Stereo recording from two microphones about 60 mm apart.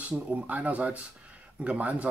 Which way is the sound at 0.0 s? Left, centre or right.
Right.